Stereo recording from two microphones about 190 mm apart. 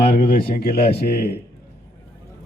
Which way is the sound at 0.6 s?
55° left (ahead or behind).